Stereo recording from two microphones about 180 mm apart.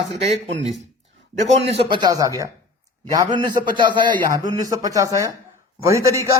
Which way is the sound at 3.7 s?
25° right (ahead or behind).